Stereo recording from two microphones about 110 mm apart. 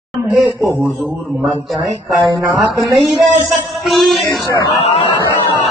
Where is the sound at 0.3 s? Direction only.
Centre (ahead or behind).